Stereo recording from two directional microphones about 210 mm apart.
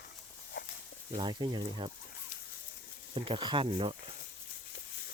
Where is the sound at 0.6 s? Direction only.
55° left (ahead or behind).